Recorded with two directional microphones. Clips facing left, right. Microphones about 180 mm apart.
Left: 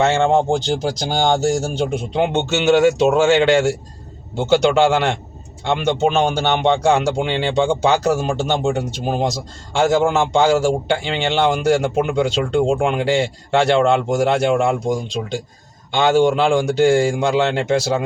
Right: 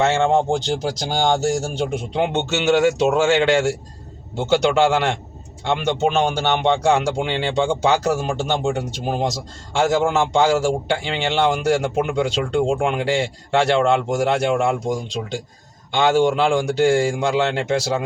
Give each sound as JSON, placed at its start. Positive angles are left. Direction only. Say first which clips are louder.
{"t": 0.0, "sound": "a man's voice", "louder": "left 2 dB", "side_deg": 25}